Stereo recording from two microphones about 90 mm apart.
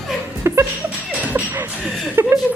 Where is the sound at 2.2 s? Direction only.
25° right (ahead or behind).